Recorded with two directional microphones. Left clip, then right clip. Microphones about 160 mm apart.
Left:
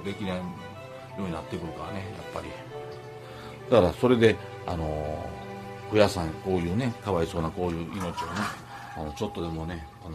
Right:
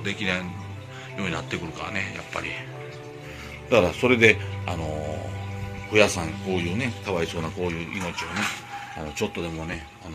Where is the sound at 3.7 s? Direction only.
15° left (ahead or behind).